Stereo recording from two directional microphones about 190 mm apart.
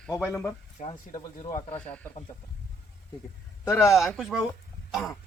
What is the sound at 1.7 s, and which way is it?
Speech, 10° left (ahead or behind).